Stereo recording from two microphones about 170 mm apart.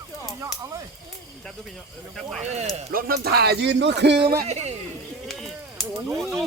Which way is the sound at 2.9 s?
60° right (ahead or behind).